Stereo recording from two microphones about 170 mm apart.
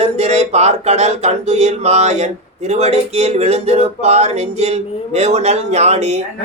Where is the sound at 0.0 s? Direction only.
40° right (ahead or behind).